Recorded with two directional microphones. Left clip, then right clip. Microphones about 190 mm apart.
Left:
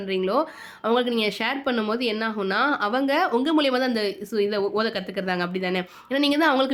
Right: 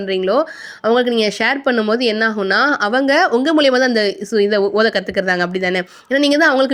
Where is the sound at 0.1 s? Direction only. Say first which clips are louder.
Right 7 dB; 30° right (ahead or behind).